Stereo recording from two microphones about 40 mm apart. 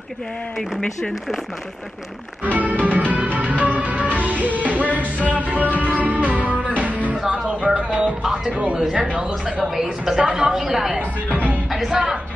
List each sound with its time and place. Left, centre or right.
0.6 s speech: centre
2.4 s music: right
8.5 s a sound: right
9.6 s a woman's voice: centre
11.0 s music: right
11.7 s music: centre